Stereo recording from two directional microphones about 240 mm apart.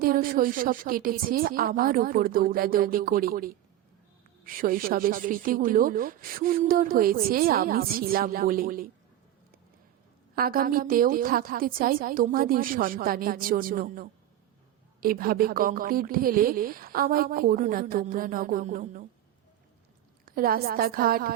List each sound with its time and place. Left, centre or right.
0.0 s a woman's voice: right
10.3 s a woman's voice: right
20.2 s a woman's voice: right